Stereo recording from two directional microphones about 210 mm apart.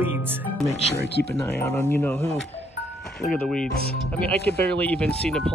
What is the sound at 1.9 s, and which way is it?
Speech, 10° left (ahead or behind).